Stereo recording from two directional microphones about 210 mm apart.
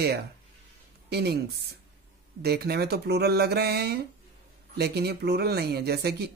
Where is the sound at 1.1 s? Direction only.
50° right (ahead or behind).